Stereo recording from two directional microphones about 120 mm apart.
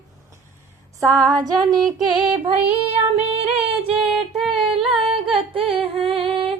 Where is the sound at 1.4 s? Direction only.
35° right (ahead or behind).